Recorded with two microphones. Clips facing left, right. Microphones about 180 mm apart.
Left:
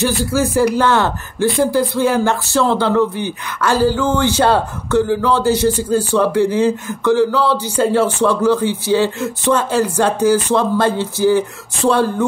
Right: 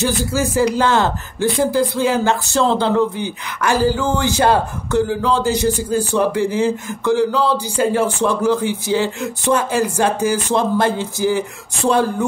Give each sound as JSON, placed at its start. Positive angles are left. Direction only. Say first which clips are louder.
{"t": 0.0, "sound": "speech", "louder": "left 2 dB", "side_deg": -20}